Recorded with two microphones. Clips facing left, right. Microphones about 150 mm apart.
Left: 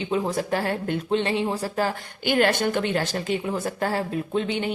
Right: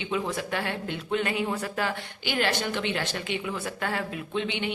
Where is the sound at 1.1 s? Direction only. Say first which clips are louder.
Left 3 dB; 30° left (ahead or behind).